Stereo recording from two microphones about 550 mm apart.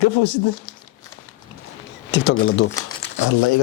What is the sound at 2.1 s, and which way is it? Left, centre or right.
Speech, centre.